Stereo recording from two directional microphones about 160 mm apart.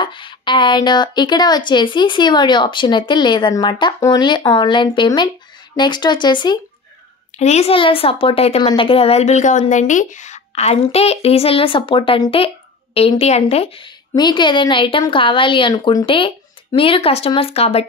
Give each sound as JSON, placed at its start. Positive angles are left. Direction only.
{"t": 0.0, "sound": "speech", "side_deg": 30}
{"t": 7.3, "sound": "a woman's voice", "side_deg": 45}